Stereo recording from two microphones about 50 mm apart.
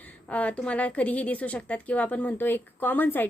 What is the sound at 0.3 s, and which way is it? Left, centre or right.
A woman's voice, left.